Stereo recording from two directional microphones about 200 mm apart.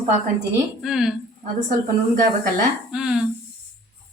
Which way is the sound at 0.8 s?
Centre (ahead or behind).